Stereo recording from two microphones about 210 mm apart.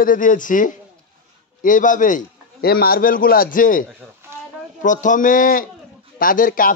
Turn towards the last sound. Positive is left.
turn(degrees=40)  # may be behind; listen again after turning